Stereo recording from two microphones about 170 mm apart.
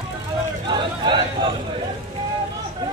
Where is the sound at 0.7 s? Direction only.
25° right (ahead or behind).